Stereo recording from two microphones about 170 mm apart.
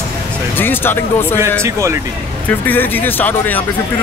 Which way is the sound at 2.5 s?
10° left (ahead or behind).